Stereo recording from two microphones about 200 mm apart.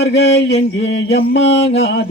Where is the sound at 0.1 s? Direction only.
60° left (ahead or behind).